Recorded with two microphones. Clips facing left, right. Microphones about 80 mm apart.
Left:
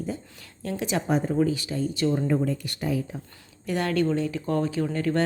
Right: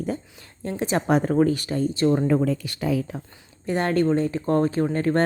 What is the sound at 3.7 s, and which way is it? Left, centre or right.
A woman's voice, right.